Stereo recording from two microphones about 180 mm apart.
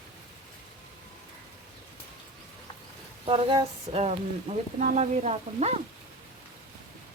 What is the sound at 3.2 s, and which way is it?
Speech, 30° right (ahead or behind).